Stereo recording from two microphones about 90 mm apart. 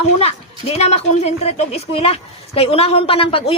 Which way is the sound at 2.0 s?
90° left.